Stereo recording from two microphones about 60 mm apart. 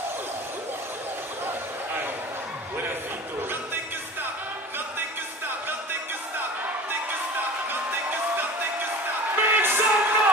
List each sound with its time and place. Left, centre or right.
7.7 s music: right